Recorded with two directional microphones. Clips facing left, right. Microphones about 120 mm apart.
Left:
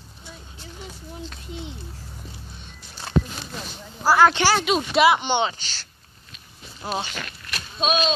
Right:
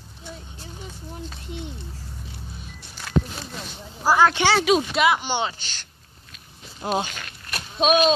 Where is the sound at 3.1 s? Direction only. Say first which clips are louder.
Even; 30° left (ahead or behind).